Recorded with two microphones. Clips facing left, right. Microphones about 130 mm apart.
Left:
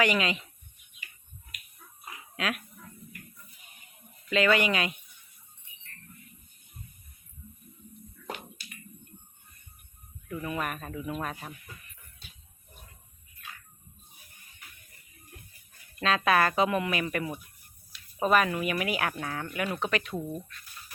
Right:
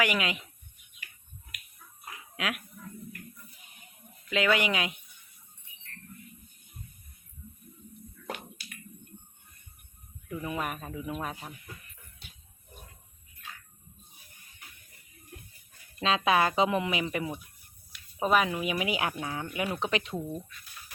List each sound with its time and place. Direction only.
0.0 s speech: 10° right (ahead or behind)
2.3 s speech: 10° right (ahead or behind)
4.3 s speech: 10° right (ahead or behind)
10.2 s speech: 10° right (ahead or behind)
16.0 s speech: 20° right (ahead or behind)
19.9 s speech: 25° right (ahead or behind)
20.1 s speech: centre (ahead or behind)